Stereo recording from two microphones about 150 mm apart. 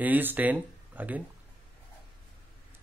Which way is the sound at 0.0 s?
10° right (ahead or behind).